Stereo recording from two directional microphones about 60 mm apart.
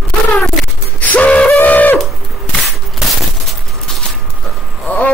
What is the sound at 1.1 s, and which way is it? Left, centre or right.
Train, left.